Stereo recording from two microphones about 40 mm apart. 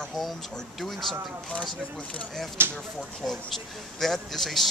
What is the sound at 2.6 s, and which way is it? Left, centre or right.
Speech, right.